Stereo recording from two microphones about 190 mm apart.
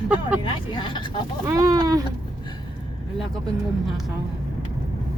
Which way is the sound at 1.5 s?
20° right (ahead or behind).